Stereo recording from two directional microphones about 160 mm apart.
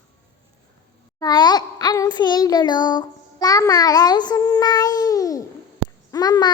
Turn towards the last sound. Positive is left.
turn(degrees=25)  # may be behind; listen again after turning